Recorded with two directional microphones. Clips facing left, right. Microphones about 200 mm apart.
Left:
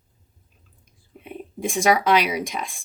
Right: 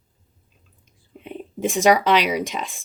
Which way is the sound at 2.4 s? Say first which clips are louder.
Right 2 dB; centre (ahead or behind).